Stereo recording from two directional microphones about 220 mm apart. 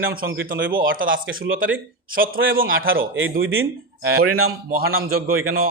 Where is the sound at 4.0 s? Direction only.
45° right (ahead or behind).